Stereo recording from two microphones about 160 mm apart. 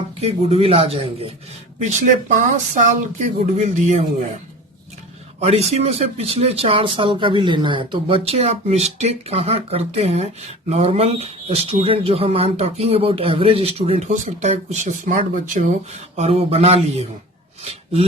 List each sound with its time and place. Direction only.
0.2 s speech: 40° right (ahead or behind)
1.8 s speech: 50° right (ahead or behind)
5.4 s speech: 40° right (ahead or behind)
17.6 s a sound: 40° right (ahead or behind)